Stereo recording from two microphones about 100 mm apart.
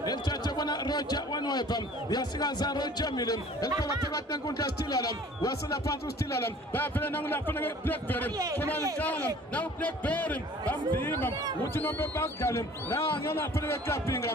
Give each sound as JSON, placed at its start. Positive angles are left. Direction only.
{"t": 0.0, "sound": "a man's voice", "side_deg": 45}